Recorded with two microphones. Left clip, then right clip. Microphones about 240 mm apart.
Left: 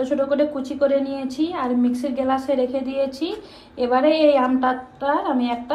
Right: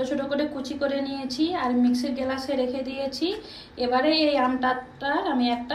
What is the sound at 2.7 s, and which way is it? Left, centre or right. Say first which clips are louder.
A woman's voice: left 6 dB; centre.